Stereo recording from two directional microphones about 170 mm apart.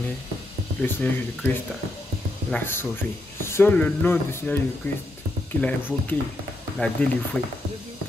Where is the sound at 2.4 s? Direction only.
10° left (ahead or behind).